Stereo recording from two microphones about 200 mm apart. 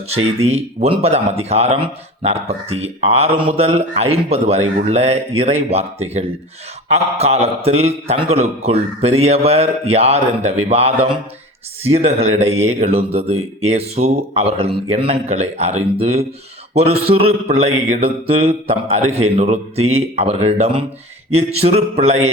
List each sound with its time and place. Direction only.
0.4 s speech: 30° right (ahead or behind)